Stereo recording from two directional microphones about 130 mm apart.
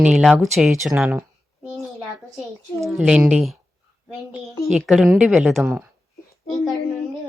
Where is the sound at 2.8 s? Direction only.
Centre (ahead or behind).